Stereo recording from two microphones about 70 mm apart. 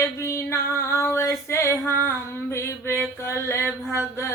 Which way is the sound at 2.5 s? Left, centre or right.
Left.